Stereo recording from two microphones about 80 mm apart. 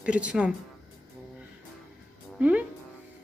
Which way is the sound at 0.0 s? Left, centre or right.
Centre.